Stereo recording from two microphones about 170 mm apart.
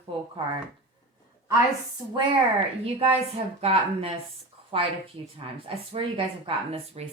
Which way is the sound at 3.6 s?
35° right (ahead or behind).